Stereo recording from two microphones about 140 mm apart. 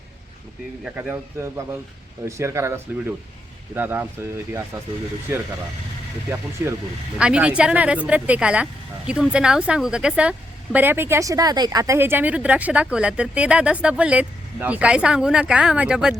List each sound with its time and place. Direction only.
0.9 s a woman's voice: 15° right (ahead or behind)
6.6 s a woman's voice: 15° right (ahead or behind)